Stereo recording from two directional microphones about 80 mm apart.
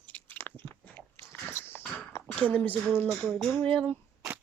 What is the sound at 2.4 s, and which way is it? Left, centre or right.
Speech, centre.